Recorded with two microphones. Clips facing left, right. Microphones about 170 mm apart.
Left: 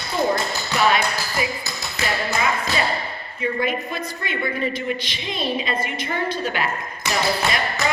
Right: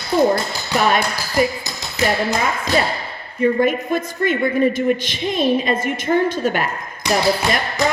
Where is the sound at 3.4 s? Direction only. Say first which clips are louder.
Right 7 dB; 50° right (ahead or behind).